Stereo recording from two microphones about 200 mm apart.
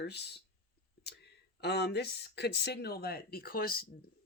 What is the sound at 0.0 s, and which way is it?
Speech, 55° left (ahead or behind).